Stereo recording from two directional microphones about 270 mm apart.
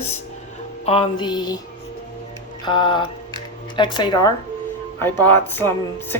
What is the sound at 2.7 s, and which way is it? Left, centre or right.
A woman's voice, centre.